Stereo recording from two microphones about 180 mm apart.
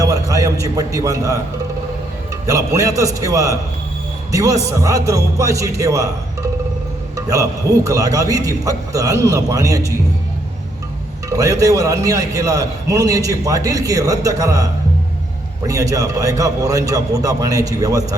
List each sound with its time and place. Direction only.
0.0 s a man's voice: 20° right (ahead or behind)
2.5 s speech: 20° right (ahead or behind)
7.2 s a man's voice: 20° right (ahead or behind)
11.3 s a man's voice: 20° right (ahead or behind)